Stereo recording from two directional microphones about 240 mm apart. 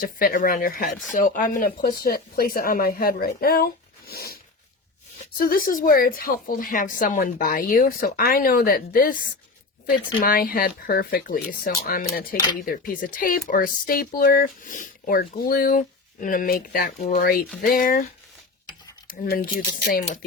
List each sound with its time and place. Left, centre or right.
0.0 s speech: left
19.0 s a sound: left
19.9 s speech: left